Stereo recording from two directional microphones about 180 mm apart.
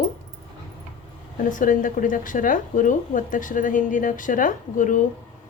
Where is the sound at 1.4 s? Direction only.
45° left (ahead or behind).